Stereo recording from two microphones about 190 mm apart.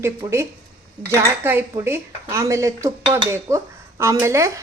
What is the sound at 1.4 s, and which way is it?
Speech, 10° right (ahead or behind).